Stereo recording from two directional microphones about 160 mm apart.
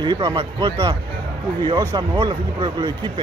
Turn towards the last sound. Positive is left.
turn(degrees=-30)  # may be behind; listen again after turning